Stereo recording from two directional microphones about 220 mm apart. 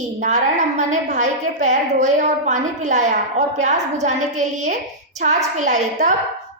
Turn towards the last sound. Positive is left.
turn(degrees=-35)  # may be behind; listen again after turning